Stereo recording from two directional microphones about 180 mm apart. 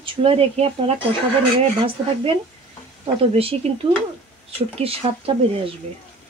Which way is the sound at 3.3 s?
30° right (ahead or behind).